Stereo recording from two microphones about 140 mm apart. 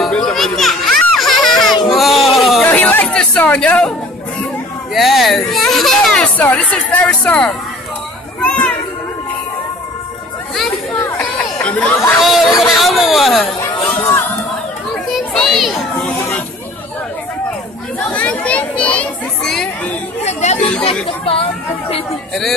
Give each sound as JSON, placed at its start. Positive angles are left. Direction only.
{"t": 0.0, "sound": "children playing", "side_deg": 0}
{"t": 1.9, "sound": "baby cry", "side_deg": 0}
{"t": 2.6, "sound": "a sound", "side_deg": 10}
{"t": 4.9, "sound": "baby cry", "side_deg": 0}
{"t": 8.4, "sound": "children playing", "side_deg": 10}
{"t": 11.1, "sound": "speech", "side_deg": 5}
{"t": 12.2, "sound": "speech", "side_deg": 0}
{"t": 13.7, "sound": "crowd", "side_deg": 10}
{"t": 15.0, "sound": "children playing", "side_deg": 0}
{"t": 17.9, "sound": "a sound", "side_deg": 10}
{"t": 20.2, "sound": "speech", "side_deg": 55}
{"t": 20.5, "sound": "speech", "side_deg": 10}
{"t": 21.3, "sound": "speech", "side_deg": 45}